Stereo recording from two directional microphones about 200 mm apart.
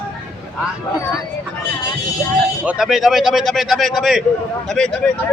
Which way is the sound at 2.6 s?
5° right (ahead or behind).